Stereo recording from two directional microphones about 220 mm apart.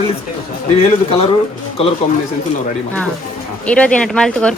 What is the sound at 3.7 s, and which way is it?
Speech, 5° left (ahead or behind).